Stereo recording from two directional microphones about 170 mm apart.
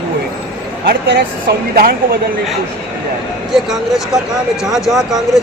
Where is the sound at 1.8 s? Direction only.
60° right (ahead or behind).